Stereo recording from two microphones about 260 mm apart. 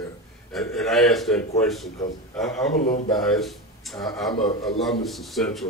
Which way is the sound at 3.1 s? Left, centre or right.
Centre.